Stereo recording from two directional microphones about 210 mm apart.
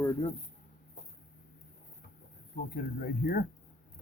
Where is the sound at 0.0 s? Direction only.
20° left (ahead or behind).